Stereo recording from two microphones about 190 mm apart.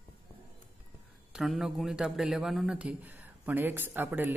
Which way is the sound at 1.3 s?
Centre (ahead or behind).